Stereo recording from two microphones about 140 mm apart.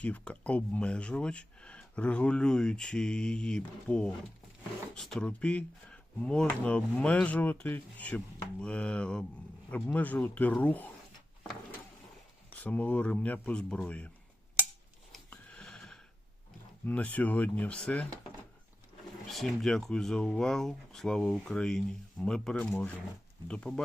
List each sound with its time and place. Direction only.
0.0 s speech: 10° left (ahead or behind)
12.5 s speech: 10° left (ahead or behind)
15.1 s a sound: 5° left (ahead or behind)
16.8 s speech: 10° left (ahead or behind)
19.3 s speech: centre (ahead or behind)